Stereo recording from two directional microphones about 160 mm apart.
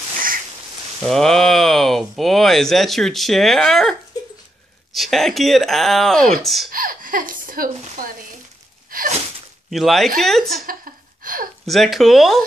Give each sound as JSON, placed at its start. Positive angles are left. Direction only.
{"t": 1.0, "sound": "speech", "side_deg": 5}
{"t": 4.9, "sound": "speech", "side_deg": 0}
{"t": 6.7, "sound": "speech", "side_deg": -60}
{"t": 8.9, "sound": "a sound", "side_deg": -60}
{"t": 9.7, "sound": "speech", "side_deg": 0}
{"t": 11.6, "sound": "speech", "side_deg": 0}